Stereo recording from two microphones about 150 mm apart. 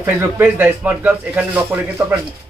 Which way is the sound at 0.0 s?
15° right (ahead or behind).